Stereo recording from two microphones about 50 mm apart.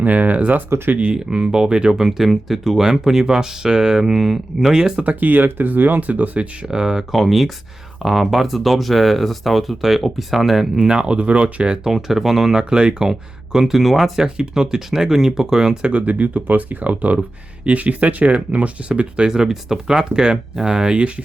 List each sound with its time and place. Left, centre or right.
0.0 s speech: right
1.3 s speech: centre
4.8 s speech: centre
5.0 s speech: right
6.7 s speech: centre
7.1 s speech: centre
11.9 s speech: centre
14.3 s speech: centre
15.9 s speech: right